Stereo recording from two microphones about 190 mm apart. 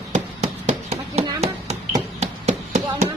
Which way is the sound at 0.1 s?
40° right (ahead or behind).